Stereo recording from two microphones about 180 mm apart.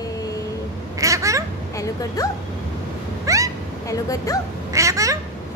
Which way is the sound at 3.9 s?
20° left (ahead or behind).